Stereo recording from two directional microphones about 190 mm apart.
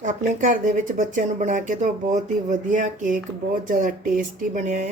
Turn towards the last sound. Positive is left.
turn(degrees=-40)  # may be behind; listen again after turning